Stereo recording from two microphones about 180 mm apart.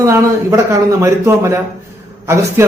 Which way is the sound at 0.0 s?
15° right (ahead or behind).